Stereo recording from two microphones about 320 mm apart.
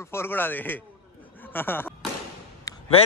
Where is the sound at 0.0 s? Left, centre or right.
Centre.